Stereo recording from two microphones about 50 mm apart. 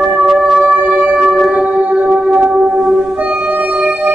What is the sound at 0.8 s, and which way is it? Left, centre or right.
Singing bowl, right.